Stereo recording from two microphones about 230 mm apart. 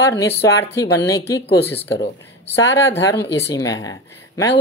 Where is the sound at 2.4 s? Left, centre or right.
Left.